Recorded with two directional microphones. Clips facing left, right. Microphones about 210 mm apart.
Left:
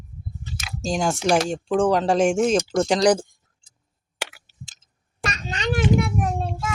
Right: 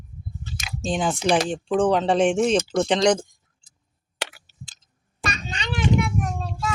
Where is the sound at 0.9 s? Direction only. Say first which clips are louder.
Left 1 dB; centre (ahead or behind).